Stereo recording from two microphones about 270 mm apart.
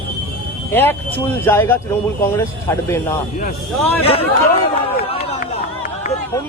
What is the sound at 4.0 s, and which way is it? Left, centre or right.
Speech, left.